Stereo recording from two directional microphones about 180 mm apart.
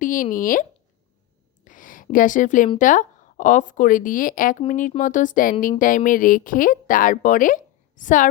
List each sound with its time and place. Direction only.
0.0 s speech: 50° left (ahead or behind)
1.6 s a sound: 45° left (ahead or behind)
2.7 s speech: 45° left (ahead or behind)